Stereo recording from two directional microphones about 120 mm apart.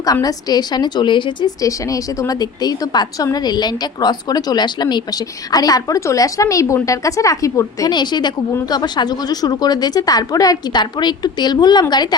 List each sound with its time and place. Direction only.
0.0 s a woman's voice: 30° left (ahead or behind)
1.6 s a woman's voice: 30° left (ahead or behind)